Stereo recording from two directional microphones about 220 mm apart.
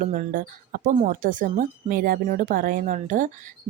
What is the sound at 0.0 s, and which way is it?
Speech, 35° right (ahead or behind).